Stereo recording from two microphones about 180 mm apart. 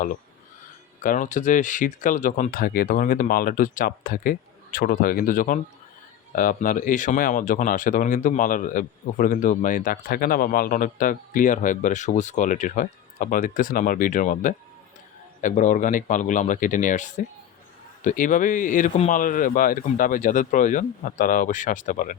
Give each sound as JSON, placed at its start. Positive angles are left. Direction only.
{"t": 1.0, "sound": "speech", "side_deg": 45}